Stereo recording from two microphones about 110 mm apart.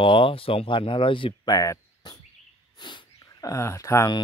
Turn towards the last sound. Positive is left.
turn(degrees=25)  # may be behind; listen again after turning